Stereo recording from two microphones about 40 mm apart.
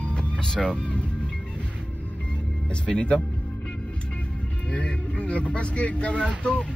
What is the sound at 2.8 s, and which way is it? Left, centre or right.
Speech, left.